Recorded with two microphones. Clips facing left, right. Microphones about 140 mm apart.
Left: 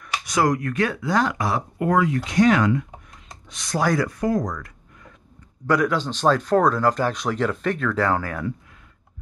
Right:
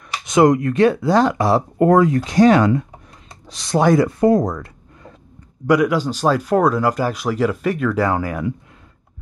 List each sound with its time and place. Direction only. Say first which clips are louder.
0.2 s speech: right 8 dB; 25° right (ahead or behind)
1.8 s speech: right 7 dB; 45° right (ahead or behind)
5.7 s speech: right 5 dB; 10° right (ahead or behind)